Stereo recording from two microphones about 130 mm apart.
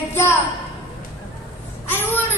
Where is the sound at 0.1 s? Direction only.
15° left (ahead or behind).